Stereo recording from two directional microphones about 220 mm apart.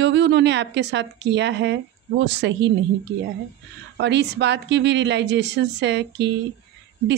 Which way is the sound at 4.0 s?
50° right (ahead or behind).